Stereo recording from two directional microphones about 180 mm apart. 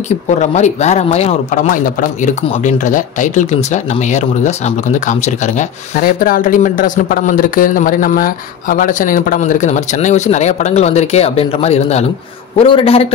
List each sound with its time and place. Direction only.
0.4 s a man's voice: 40° left (ahead or behind)